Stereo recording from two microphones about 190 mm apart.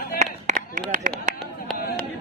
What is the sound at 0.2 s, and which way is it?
Clapping, 40° right (ahead or behind).